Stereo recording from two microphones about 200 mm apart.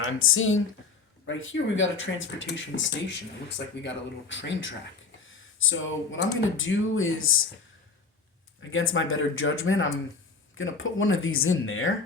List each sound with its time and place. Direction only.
0.0 s speech: 85° left; by 4.7 s 65° left (ahead or behind)
5.2 s speech: 80° left
8.7 s speech: 80° left